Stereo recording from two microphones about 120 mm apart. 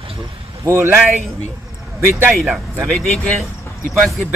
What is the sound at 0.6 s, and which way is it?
A man's voice, 20° right (ahead or behind).